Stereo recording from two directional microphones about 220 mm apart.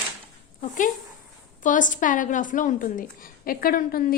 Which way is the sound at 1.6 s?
35° left (ahead or behind).